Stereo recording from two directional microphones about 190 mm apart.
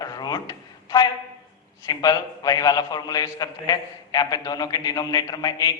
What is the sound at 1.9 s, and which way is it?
A man's voice, 20° left (ahead or behind).